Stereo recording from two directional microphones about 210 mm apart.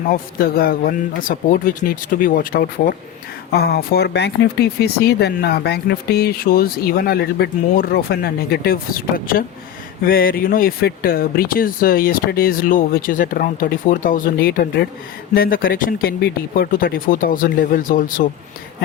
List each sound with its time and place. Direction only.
0.3 s speech: 45° left (ahead or behind)